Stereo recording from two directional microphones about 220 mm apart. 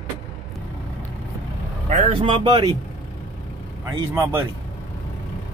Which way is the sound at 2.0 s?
25° right (ahead or behind).